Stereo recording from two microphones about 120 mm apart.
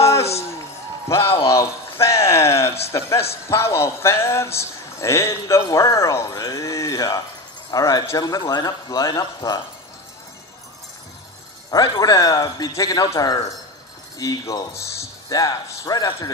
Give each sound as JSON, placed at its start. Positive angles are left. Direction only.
{"t": 0.0, "sound": "a sound", "side_deg": 25}
{"t": 2.9, "sound": "a man's voice", "side_deg": 25}
{"t": 11.7, "sound": "a man's voice", "side_deg": 30}